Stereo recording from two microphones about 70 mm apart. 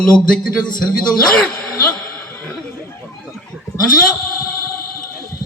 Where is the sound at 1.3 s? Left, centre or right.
Centre.